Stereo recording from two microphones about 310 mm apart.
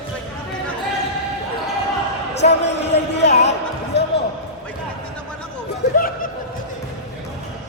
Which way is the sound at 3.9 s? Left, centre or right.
Left.